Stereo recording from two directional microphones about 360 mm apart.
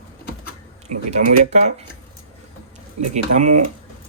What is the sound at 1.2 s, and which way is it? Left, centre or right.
Speech, centre.